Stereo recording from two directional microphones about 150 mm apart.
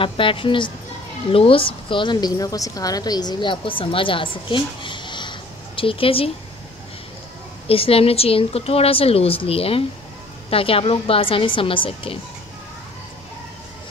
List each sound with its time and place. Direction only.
0.0 s a woman's voice: 35° left (ahead or behind)
7.6 s a woman's voice: 40° left (ahead or behind)